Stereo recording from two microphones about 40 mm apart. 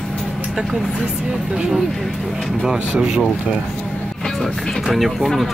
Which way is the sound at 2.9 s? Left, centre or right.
Right.